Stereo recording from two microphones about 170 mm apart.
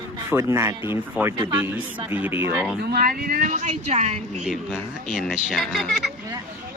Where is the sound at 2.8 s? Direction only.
65° right (ahead or behind); by 4.4 s 40° right (ahead or behind).